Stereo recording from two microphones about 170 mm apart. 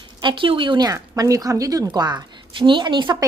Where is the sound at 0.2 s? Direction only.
30° right (ahead or behind).